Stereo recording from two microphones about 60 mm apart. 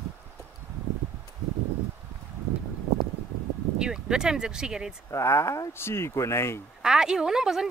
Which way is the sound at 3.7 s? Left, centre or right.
Centre.